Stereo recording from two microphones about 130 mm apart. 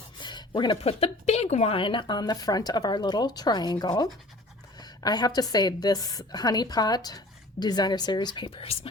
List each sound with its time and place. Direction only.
0.2 s a sound: 35° left (ahead or behind)
0.9 s a woman's voice: 50° left (ahead or behind)
1.7 s a woman's voice: 40° left (ahead or behind)
8.6 s a woman's voice: 45° left (ahead or behind)